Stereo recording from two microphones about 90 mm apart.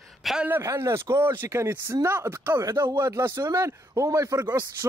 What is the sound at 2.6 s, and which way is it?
A man's voice, 40° right (ahead or behind).